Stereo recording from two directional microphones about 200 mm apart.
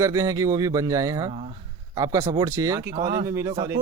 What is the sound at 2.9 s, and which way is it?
Speech, 45° right (ahead or behind).